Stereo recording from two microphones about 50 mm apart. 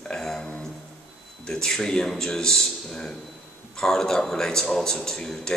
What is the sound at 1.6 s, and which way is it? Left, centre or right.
A man's voice, centre.